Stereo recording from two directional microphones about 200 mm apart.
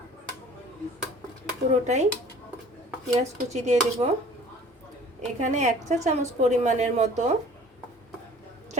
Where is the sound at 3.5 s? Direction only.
35° right (ahead or behind).